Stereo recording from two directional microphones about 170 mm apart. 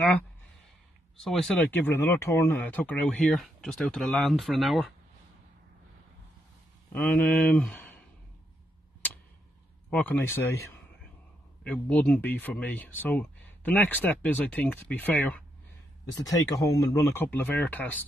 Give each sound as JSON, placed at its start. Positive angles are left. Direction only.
{"t": 1.2, "sound": "speech", "side_deg": 0}
{"t": 6.9, "sound": "speech", "side_deg": 10}
{"t": 9.8, "sound": "speech", "side_deg": 10}
{"t": 16.4, "sound": "speech", "side_deg": 20}